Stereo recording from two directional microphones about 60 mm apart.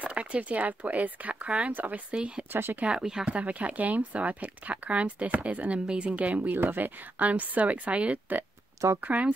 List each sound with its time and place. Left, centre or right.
0.0 s speech: right
2.1 s speech: centre
2.5 s speech: right
2.8 s speech: centre
3.3 s speech: right
6.5 s speech: right